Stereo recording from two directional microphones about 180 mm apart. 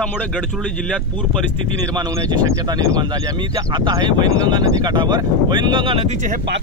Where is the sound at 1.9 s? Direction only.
20° right (ahead or behind).